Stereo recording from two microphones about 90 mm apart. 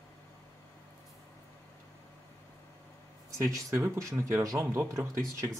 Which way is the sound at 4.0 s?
30° right (ahead or behind).